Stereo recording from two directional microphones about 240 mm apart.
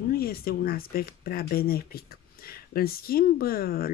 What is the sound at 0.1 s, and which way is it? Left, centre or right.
Speech, left.